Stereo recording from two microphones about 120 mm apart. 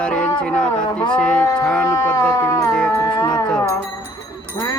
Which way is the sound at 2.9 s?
25° left (ahead or behind).